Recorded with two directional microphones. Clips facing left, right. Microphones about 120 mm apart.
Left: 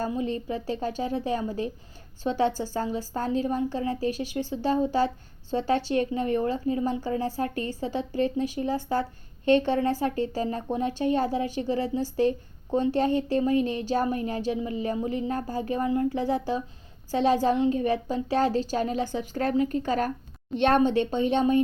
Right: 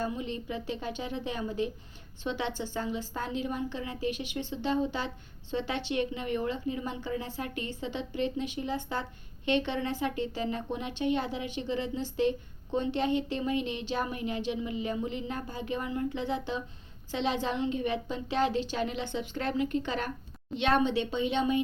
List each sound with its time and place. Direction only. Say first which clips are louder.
0.0 s speech: left 5 dB; 35° left (ahead or behind)